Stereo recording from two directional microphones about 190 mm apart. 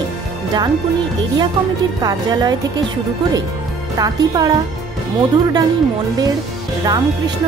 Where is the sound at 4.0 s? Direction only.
20° right (ahead or behind).